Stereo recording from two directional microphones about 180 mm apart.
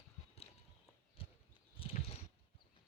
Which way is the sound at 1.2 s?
30° left (ahead or behind).